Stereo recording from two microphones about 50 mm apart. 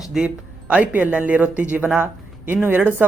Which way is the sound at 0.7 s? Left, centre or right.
Right.